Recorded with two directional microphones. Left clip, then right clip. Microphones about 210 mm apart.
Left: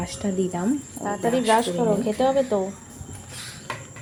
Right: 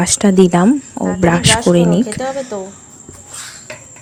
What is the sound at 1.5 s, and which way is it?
A woman's voice, 5° left (ahead or behind).